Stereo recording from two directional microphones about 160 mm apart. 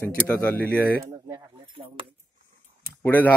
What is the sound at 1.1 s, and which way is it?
Speech, 20° right (ahead or behind).